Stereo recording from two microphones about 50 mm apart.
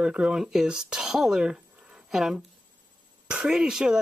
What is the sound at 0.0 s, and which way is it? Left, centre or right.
Speech, centre.